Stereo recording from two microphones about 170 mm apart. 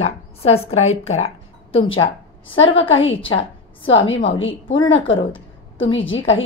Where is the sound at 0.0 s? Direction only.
35° left (ahead or behind).